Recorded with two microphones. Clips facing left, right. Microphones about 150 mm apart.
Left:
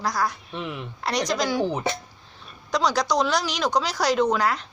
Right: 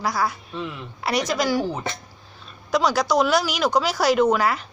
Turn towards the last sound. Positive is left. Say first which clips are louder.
# right 3 dB
turn(degrees=-5)  # may be behind; listen again after turning